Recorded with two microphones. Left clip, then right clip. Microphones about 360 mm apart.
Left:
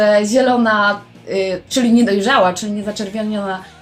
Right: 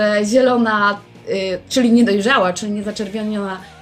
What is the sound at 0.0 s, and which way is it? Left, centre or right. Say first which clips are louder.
A woman's voice: left 2 dB; right.